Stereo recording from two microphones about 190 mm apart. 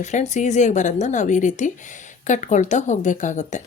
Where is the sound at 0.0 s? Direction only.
40° left (ahead or behind).